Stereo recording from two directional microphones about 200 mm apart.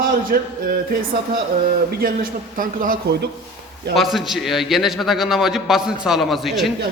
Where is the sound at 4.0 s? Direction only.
Centre (ahead or behind).